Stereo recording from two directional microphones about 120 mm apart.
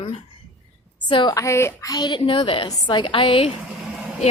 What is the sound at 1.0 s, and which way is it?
Speech, 40° left (ahead or behind).